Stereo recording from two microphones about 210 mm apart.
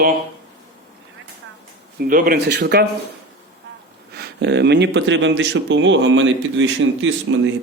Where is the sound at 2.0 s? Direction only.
40° right (ahead or behind).